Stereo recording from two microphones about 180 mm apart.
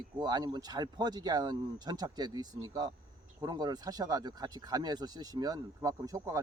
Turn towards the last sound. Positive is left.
turn(degrees=-20)  # may be behind; listen again after turning